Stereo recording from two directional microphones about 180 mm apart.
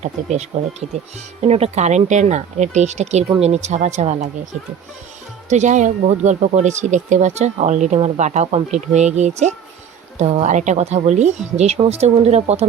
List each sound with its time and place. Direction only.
0.0 s speech: 40° right (ahead or behind)
1.5 s speech: 35° right (ahead or behind)
5.5 s speech: 40° right (ahead or behind)